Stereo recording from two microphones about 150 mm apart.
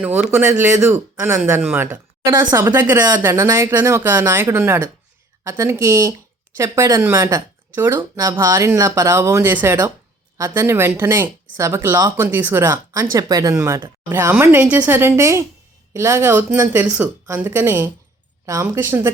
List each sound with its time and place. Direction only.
0.0 s speech: 15° right (ahead or behind)